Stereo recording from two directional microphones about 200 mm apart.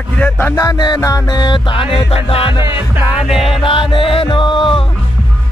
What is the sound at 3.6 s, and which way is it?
Music, 25° left (ahead or behind).